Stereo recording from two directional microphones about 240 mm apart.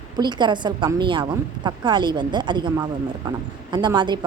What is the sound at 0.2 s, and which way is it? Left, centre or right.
A woman's voice, centre.